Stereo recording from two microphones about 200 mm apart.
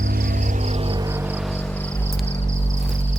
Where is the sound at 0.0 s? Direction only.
45° right (ahead or behind).